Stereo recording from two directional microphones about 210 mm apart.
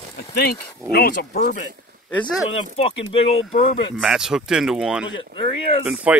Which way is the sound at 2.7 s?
30° left (ahead or behind).